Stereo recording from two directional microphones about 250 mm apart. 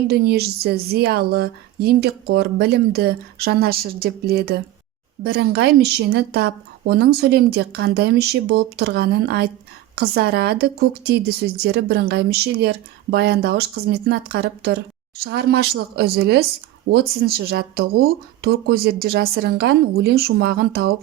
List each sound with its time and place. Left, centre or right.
0.1 s speech: right